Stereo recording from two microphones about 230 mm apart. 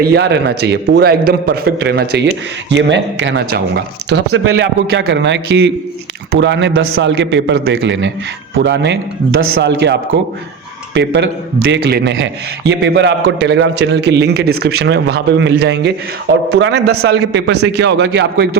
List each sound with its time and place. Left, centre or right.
0.0 s a man's voice: right
4.4 s a man's voice: right